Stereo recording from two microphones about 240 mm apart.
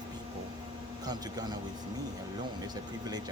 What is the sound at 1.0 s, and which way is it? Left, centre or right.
Speech, centre.